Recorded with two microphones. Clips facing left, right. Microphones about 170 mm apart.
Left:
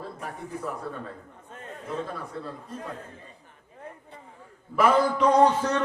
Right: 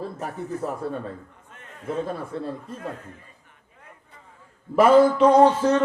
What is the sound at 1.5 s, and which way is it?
Chatter, 35° left (ahead or behind).